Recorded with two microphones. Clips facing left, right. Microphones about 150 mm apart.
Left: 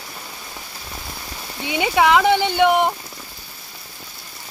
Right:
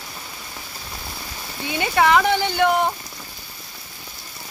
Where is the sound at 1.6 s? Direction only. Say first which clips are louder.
Left 2 dB; 15° left (ahead or behind).